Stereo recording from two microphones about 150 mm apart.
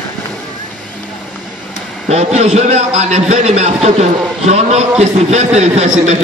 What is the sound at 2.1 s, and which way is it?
Speech, 45° right (ahead or behind).